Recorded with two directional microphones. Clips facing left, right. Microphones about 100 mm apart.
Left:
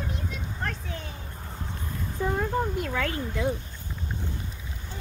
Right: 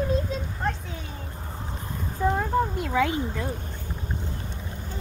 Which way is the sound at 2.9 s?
15° right (ahead or behind).